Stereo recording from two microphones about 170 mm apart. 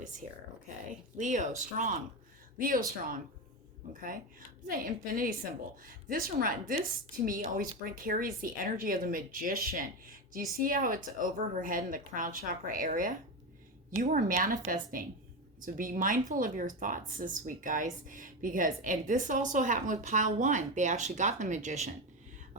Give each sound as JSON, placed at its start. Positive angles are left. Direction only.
{"t": 1.2, "sound": "a woman's voice", "side_deg": -45}
{"t": 4.0, "sound": "a woman's voice", "side_deg": -55}